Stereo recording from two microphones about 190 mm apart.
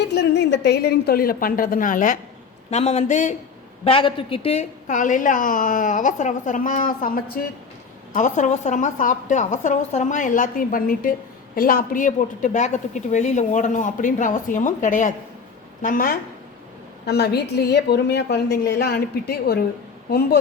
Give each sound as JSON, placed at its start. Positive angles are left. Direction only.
{"t": 0.0, "sound": "a woman's voice", "side_deg": 60}
{"t": 3.8, "sound": "a woman's voice", "side_deg": 30}
{"t": 17.1, "sound": "a woman's voice", "side_deg": 60}